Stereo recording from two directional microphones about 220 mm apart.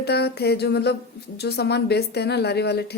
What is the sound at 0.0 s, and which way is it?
A woman's voice, 45° left (ahead or behind).